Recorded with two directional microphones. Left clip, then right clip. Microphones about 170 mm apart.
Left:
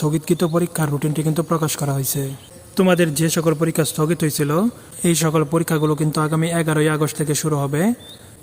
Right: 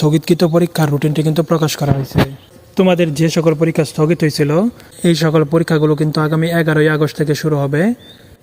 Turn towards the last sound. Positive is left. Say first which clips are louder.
# right 5 dB
turn(degrees=-15)  # may be behind; listen again after turning